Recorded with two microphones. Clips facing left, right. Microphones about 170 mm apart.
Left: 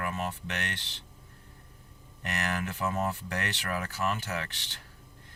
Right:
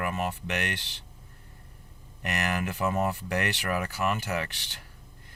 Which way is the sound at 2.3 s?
10° right (ahead or behind).